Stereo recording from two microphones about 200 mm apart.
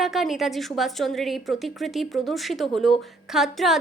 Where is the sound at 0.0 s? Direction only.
Centre (ahead or behind).